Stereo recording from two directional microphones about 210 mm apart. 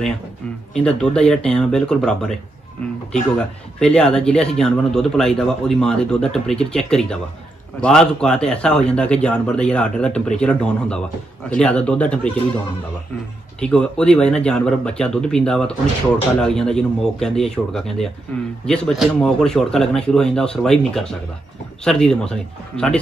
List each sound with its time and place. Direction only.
0.7 s speech: 5° left (ahead or behind)
13.6 s speech: 5° left (ahead or behind)